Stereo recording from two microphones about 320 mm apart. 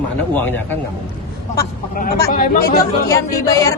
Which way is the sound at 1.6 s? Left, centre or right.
Left.